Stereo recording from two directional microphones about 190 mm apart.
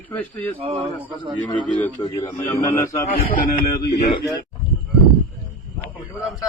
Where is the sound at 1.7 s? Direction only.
10° left (ahead or behind).